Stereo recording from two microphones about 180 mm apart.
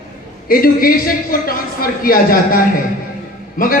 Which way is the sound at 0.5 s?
55° left (ahead or behind).